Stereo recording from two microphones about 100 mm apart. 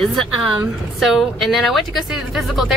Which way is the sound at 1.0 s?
Centre (ahead or behind).